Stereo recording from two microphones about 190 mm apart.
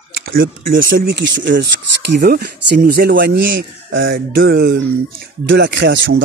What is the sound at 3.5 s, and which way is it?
Speech, 80° right.